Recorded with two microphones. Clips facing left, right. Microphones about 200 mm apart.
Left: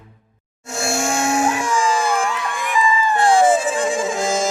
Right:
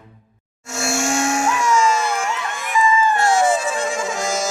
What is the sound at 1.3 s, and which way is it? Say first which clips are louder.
Music: left 2 dB; 35° left (ahead or behind).